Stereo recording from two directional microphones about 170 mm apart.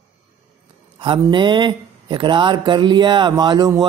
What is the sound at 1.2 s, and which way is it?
Speech, 25° right (ahead or behind).